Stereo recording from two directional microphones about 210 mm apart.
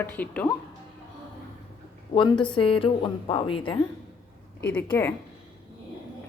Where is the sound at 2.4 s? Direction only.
25° left (ahead or behind).